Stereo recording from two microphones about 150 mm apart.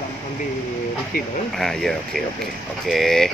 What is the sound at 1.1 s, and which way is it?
Speech, 70° left (ahead or behind).